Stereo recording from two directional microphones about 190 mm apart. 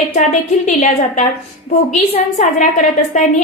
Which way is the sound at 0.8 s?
40° left (ahead or behind).